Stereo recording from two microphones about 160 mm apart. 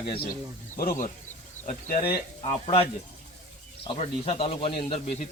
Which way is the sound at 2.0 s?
35° left (ahead or behind).